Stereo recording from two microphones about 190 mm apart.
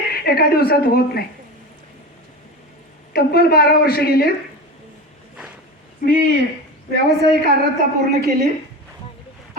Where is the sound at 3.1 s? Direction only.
55° left (ahead or behind).